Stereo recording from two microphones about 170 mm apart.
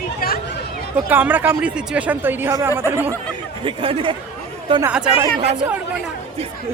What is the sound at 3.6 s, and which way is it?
Speech, 30° right (ahead or behind).